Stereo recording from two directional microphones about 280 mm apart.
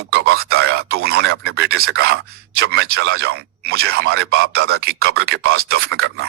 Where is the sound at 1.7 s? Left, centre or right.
Right.